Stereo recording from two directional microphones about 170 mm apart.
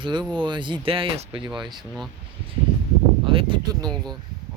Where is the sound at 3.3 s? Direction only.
30° right (ahead or behind).